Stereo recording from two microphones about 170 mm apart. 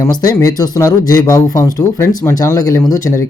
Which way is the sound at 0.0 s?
20° left (ahead or behind).